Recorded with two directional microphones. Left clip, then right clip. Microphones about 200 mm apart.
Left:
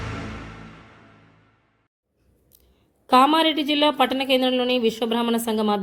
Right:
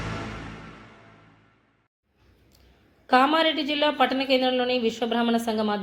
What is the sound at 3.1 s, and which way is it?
A woman's voice, 65° left (ahead or behind).